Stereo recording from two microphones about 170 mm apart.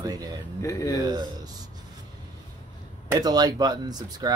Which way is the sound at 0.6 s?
20° left (ahead or behind).